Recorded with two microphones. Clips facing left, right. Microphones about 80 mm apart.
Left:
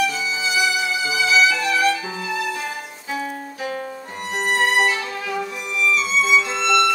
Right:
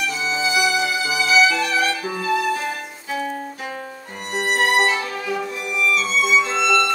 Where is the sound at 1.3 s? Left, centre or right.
Centre.